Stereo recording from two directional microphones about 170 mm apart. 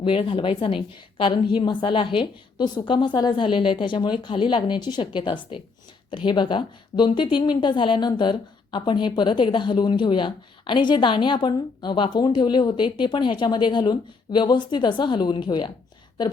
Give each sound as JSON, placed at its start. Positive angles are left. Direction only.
{"t": 0.0, "sound": "a woman's voice", "side_deg": 30}